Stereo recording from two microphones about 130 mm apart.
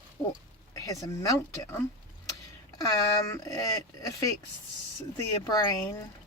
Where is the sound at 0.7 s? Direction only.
25° left (ahead or behind).